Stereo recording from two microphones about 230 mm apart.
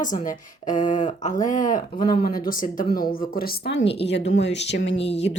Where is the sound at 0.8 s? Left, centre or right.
Left.